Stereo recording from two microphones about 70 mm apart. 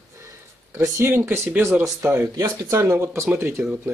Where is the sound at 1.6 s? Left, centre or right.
Right.